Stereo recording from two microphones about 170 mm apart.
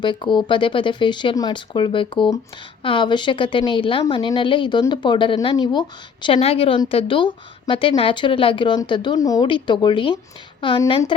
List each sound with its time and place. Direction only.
0.0 s a woman's voice: 30° left (ahead or behind)